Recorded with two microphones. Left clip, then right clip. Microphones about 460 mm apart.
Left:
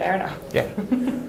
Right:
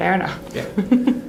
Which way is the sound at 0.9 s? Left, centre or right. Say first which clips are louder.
Right 7 dB; right.